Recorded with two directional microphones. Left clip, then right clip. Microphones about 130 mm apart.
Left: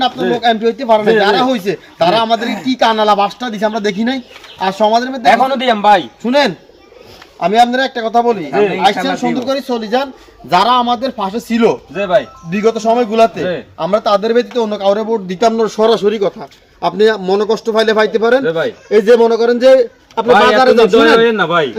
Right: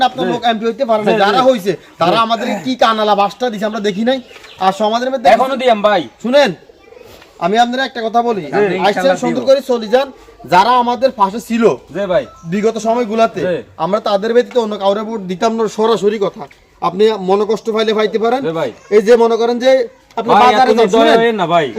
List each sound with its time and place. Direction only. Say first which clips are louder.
0.0 s a man's voice: left 1 dB; 20° right (ahead or behind)
20.1 s a man's voice: even; 15° right (ahead or behind)